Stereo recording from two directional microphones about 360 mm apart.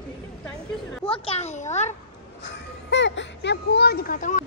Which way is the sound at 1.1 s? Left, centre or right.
Centre.